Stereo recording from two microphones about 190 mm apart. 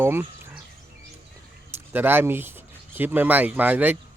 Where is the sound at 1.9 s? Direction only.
10° right (ahead or behind).